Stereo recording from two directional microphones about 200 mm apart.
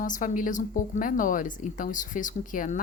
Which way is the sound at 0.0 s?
40° left (ahead or behind).